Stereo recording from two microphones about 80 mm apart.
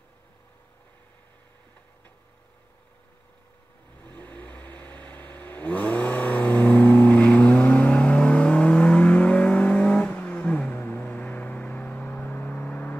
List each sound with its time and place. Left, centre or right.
4.0 s vehicle: left